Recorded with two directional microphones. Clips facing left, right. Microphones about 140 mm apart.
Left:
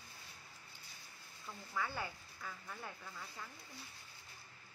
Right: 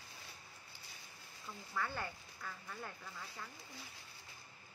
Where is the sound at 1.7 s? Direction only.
10° left (ahead or behind).